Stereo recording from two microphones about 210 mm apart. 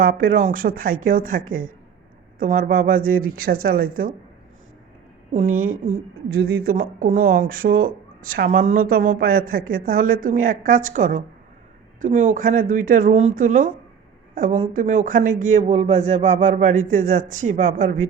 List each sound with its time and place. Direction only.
0.0 s speech: 40° right (ahead or behind)
5.3 s speech: 40° right (ahead or behind)